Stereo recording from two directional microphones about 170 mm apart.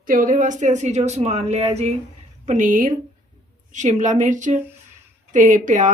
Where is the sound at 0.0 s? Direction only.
55° right (ahead or behind).